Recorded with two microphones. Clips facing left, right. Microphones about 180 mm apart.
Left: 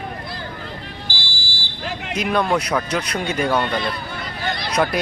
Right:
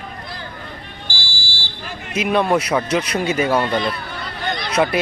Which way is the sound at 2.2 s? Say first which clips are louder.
Right 3 dB; 5° right (ahead or behind).